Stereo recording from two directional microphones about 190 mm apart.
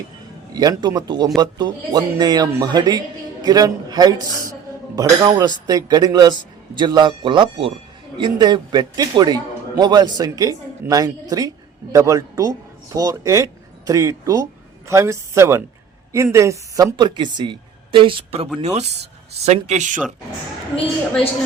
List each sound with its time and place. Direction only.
0.5 s a man's voice: 20° right (ahead or behind); by 20.0 s 40° right (ahead or behind)